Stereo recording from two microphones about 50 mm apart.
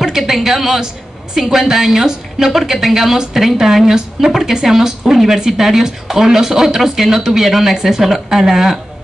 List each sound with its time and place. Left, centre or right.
0.3 s a woman's voice: centre